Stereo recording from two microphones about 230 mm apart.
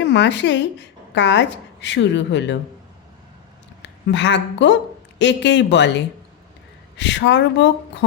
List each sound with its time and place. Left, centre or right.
0.0 s a woman's voice: left
3.8 s a woman's voice: left